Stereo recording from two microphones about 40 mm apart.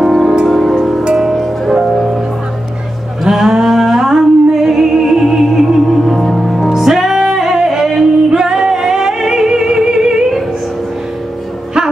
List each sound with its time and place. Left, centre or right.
0.0 s music: centre
1.1 s music: centre
3.3 s music: centre
6.1 s music: centre
7.2 s music: centre
7.4 s music: centre
8.3 s music: centre